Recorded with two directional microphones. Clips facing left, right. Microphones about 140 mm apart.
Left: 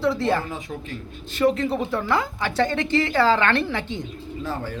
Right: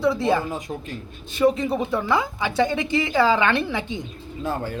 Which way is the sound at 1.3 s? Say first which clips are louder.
Right 1 dB; 15° right (ahead or behind).